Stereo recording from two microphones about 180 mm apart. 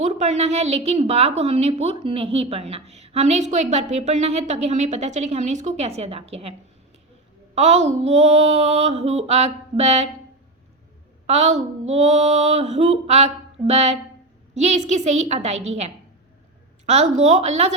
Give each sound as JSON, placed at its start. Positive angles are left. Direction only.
{"t": 0.0, "sound": "a woman's voice", "side_deg": -40}
{"t": 7.5, "sound": "a woman's voice", "side_deg": -40}
{"t": 11.3, "sound": "a woman's voice", "side_deg": -35}